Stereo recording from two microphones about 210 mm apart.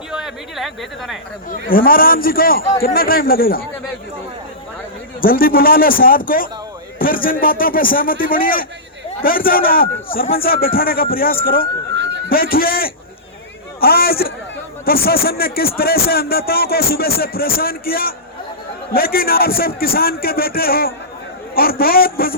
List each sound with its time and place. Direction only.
0.1 s a woman's voice: centre (ahead or behind)
1.5 s a man's voice: 45° left (ahead or behind)
5.2 s a man's voice: 45° left (ahead or behind)
11.9 s a sound: 55° right (ahead or behind)
12.3 s a man's voice: 45° left (ahead or behind)